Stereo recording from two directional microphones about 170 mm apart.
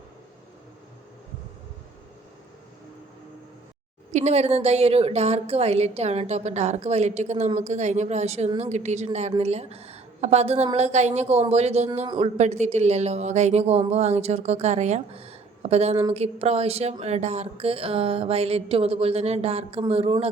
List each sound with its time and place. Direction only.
4.1 s a woman's voice: 40° right (ahead or behind)
12.0 s speech: 30° right (ahead or behind)
12.4 s a woman's voice: 40° right (ahead or behind)